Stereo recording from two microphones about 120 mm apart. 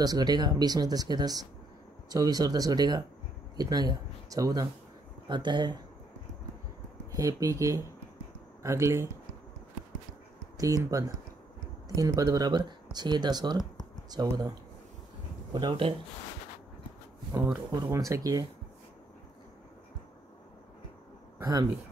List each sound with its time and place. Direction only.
0.0 s speech: 35° right (ahead or behind)
7.2 s speech: 30° right (ahead or behind)
10.6 s speech: 30° right (ahead or behind)
15.5 s speech: 40° right (ahead or behind)
17.9 s speech: 30° right (ahead or behind)
21.4 s a man's voice: 35° right (ahead or behind)